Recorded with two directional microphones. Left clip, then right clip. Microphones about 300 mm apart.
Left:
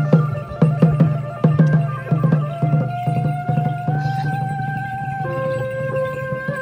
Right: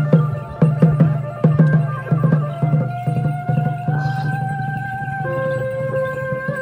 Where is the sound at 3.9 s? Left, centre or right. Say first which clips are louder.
Even; centre.